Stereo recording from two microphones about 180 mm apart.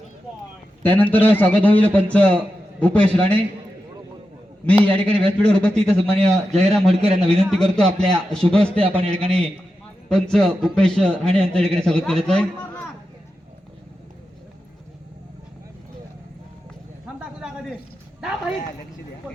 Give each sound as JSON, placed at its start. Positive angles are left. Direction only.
{"t": 0.8, "sound": "a man's voice", "side_deg": 10}
{"t": 4.6, "sound": "a man's voice", "side_deg": 10}
{"t": 8.4, "sound": "a man's voice", "side_deg": -30}
{"t": 10.1, "sound": "a man's voice", "side_deg": 5}
{"t": 17.2, "sound": "a sound", "side_deg": -5}